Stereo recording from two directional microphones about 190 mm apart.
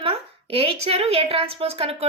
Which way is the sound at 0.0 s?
30° right (ahead or behind).